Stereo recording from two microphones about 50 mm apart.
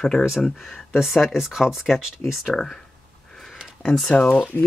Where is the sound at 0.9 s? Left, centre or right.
Centre.